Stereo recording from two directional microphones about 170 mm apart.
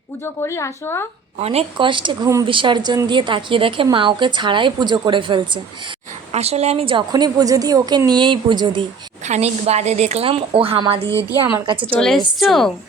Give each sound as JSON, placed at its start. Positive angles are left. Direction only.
{"t": 0.4, "sound": "speech", "side_deg": 15}
{"t": 1.4, "sound": "speech", "side_deg": -35}
{"t": 6.3, "sound": "speech", "side_deg": -40}
{"t": 9.2, "sound": "a woman's voice", "side_deg": -40}
{"t": 11.9, "sound": "a woman's voice", "side_deg": 5}